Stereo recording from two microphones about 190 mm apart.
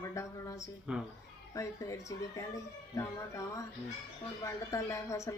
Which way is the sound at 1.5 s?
15° left (ahead or behind).